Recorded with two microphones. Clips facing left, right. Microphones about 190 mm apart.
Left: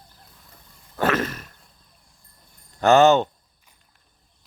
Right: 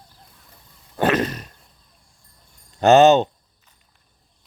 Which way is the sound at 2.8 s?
20° right (ahead or behind).